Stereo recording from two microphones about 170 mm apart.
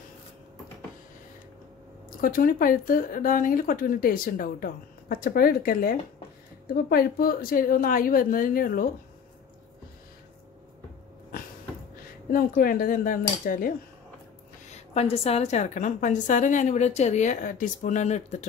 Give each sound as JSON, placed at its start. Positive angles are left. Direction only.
{"t": 2.2, "sound": "speech", "side_deg": 55}
{"t": 12.3, "sound": "speech", "side_deg": 60}
{"t": 14.7, "sound": "a woman's voice", "side_deg": 40}